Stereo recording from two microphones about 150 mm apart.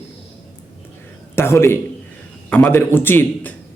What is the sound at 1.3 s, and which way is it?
A man's voice, 15° left (ahead or behind).